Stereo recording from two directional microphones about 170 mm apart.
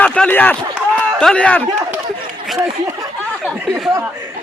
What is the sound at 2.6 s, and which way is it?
Speech, 20° right (ahead or behind).